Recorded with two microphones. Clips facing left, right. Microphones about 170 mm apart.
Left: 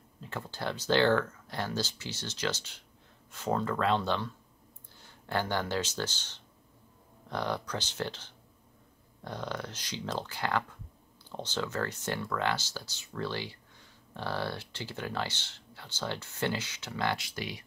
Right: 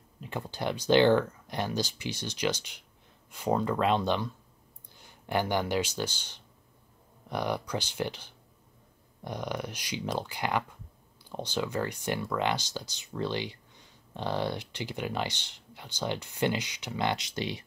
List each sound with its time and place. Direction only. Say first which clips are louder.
0.2 s speech: right 3 dB; 15° right (ahead or behind)